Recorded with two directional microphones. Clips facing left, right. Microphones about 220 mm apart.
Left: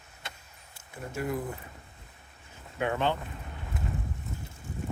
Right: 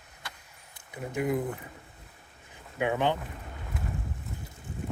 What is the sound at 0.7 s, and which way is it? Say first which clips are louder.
Speech: right 4 dB; 15° right (ahead or behind).